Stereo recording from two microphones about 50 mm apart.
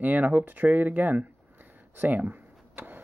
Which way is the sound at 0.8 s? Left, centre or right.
Right.